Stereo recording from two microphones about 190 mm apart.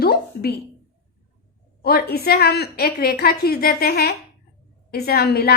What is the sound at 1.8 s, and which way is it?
A woman's voice, 55° left (ahead or behind).